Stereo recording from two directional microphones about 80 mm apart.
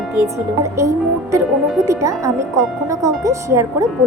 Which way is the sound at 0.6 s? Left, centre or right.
Right.